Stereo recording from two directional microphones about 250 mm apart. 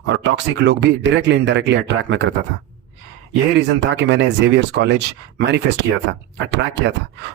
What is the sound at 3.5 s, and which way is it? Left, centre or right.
Speech, right.